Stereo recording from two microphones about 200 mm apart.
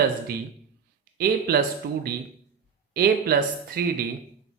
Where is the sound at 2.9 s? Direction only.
50° right (ahead or behind).